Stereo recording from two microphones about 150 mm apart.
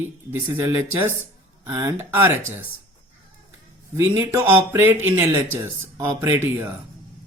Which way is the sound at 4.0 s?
15° right (ahead or behind).